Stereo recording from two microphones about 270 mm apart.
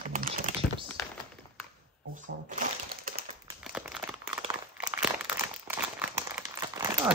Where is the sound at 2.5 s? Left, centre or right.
Right.